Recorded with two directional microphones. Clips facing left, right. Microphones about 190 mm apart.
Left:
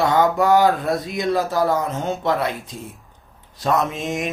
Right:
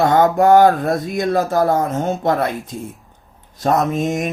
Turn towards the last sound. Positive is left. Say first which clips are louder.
# right 5 dB
turn(degrees=-45)  # may be behind; listen again after turning